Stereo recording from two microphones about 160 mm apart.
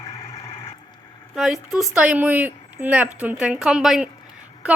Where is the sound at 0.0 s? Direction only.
20° left (ahead or behind).